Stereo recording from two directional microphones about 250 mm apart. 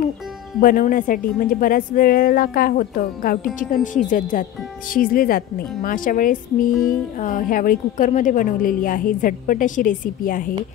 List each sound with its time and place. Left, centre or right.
0.6 s a woman's voice: left